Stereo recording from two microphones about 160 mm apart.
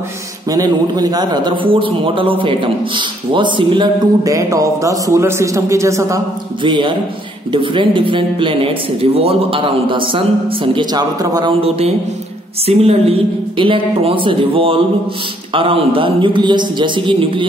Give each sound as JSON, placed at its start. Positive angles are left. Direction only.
{"t": 0.5, "sound": "a man's voice", "side_deg": -25}
{"t": 6.6, "sound": "speech", "side_deg": -30}
{"t": 12.6, "sound": "speech", "side_deg": -40}